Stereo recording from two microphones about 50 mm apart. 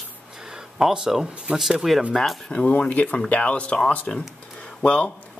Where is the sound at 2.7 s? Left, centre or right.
Left.